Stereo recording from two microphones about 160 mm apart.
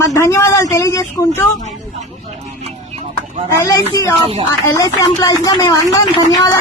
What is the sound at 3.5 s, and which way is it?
Speech, 20° left (ahead or behind).